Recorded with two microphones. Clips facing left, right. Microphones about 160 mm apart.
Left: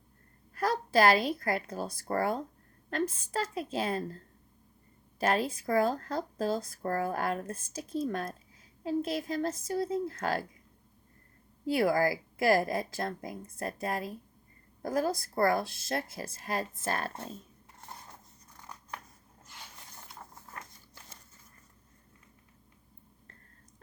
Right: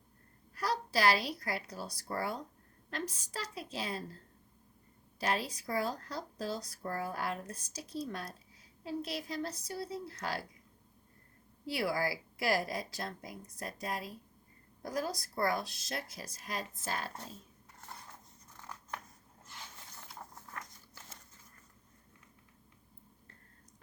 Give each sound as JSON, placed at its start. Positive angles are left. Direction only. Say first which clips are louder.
{"t": 0.5, "sound": "speech", "louder": "left 7 dB", "side_deg": 50}
{"t": 5.2, "sound": "speech", "louder": "left 6 dB", "side_deg": 50}
{"t": 11.6, "sound": "speech", "louder": "left 7 dB", "side_deg": 45}